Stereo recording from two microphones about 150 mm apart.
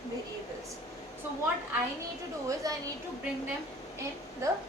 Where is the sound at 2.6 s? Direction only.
25° right (ahead or behind).